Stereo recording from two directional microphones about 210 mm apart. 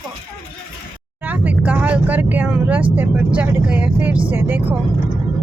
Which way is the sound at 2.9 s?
5° right (ahead or behind).